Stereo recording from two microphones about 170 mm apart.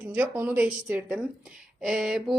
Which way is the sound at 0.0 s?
10° right (ahead or behind).